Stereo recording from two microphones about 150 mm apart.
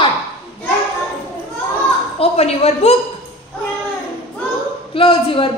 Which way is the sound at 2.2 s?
40° left (ahead or behind).